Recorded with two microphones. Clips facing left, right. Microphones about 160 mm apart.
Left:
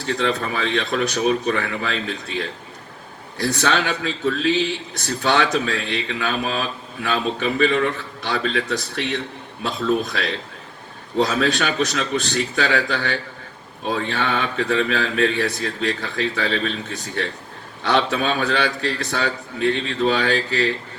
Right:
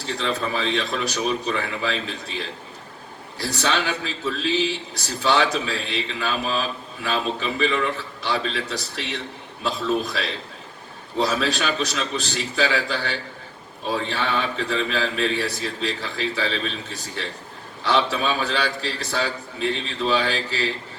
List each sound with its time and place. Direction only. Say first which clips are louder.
0.1 s a man's voice: left 3 dB; 60° left (ahead or behind)